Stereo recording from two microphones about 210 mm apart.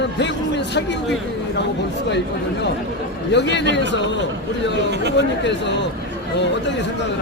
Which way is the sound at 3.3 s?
55° left (ahead or behind).